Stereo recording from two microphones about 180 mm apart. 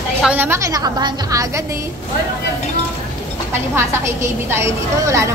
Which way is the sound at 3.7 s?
15° right (ahead or behind).